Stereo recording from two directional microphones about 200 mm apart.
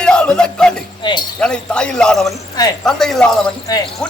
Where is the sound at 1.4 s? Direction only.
5° left (ahead or behind).